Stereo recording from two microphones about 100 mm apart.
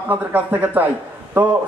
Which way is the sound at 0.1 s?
15° right (ahead or behind).